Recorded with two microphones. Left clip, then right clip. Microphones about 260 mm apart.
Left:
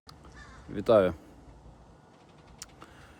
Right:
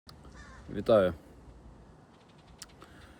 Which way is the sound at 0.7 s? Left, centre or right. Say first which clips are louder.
Left 2 dB; centre.